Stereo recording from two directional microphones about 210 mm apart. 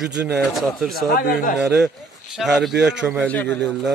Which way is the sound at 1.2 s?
45° left (ahead or behind).